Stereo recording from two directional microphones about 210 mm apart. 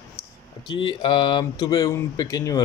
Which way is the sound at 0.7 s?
25° left (ahead or behind).